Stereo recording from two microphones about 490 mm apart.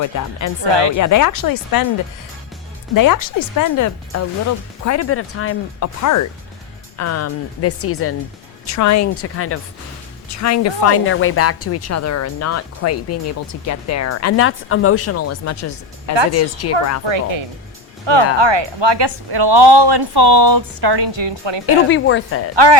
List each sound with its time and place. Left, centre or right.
0.0 s a woman's voice: left
0.7 s speech: right
0.9 s a woman's voice: left
2.9 s a woman's voice: left
17.1 s speech: right
21.8 s speech: left
22.5 s speech: right